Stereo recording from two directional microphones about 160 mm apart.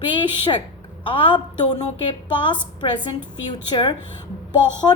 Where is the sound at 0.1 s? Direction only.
30° left (ahead or behind).